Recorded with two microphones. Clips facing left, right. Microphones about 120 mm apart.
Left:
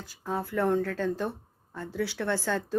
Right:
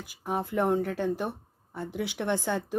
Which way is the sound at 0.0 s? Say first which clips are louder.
Right 1 dB; 15° right (ahead or behind).